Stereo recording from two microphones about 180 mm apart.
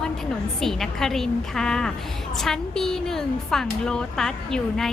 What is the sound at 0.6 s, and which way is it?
A woman's voice, centre (ahead or behind).